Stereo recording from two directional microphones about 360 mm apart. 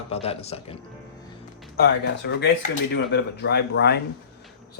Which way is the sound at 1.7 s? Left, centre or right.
Left.